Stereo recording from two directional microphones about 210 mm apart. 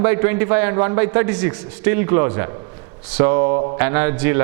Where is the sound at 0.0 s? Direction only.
10° right (ahead or behind).